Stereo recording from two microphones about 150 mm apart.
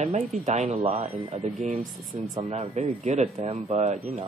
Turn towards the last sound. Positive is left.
turn(degrees=-45)  # may be behind; listen again after turning